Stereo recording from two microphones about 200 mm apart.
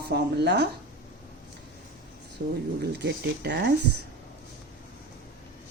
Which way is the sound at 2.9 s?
55° right (ahead or behind).